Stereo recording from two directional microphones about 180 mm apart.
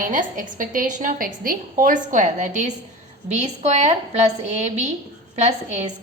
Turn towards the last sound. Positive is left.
turn(degrees=-40)  # may be behind; listen again after turning